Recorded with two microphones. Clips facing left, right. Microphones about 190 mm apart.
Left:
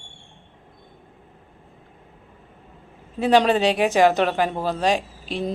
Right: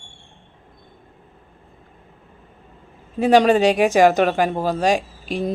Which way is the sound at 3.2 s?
45° right (ahead or behind).